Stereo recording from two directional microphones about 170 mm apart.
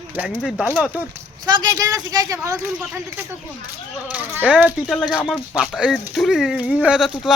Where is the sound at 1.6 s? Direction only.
20° right (ahead or behind).